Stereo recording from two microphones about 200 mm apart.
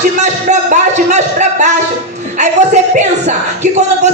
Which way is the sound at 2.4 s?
35° right (ahead or behind).